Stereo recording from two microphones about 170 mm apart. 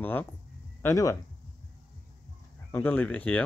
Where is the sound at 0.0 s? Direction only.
10° left (ahead or behind).